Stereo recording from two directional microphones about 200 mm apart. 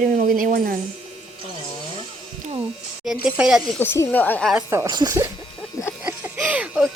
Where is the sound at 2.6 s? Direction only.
Centre (ahead or behind).